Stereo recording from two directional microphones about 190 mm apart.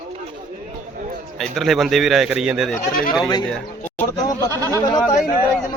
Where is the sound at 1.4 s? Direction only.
Centre (ahead or behind); by 4.5 s 20° left (ahead or behind).